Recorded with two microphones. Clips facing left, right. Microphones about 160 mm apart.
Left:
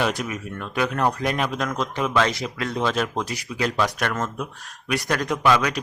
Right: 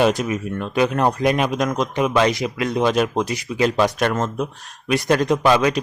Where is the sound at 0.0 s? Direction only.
25° right (ahead or behind).